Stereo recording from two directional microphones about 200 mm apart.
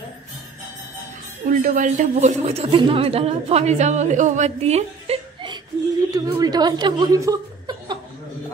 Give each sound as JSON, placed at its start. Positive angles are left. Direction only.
{"t": 1.4, "sound": "a man's voice", "side_deg": -40}